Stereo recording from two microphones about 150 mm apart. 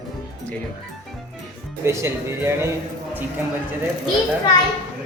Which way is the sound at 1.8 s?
15° right (ahead or behind).